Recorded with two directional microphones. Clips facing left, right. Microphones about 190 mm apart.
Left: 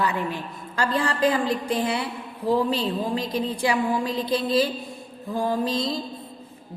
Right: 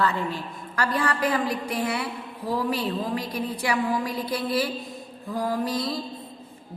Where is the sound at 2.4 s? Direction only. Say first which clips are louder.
Left 4 dB; 25° left (ahead or behind).